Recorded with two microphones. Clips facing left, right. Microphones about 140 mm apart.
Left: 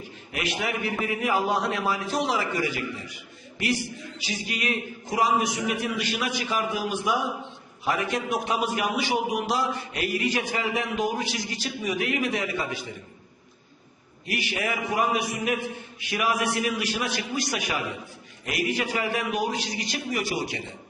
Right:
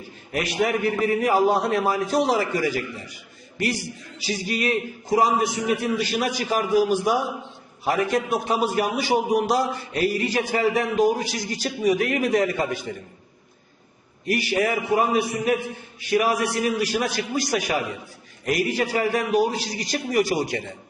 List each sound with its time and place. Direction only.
0.3 s a man's voice: 40° right (ahead or behind)
14.3 s a man's voice: 40° right (ahead or behind)